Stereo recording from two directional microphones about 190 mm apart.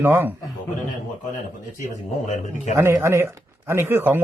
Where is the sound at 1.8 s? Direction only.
40° left (ahead or behind).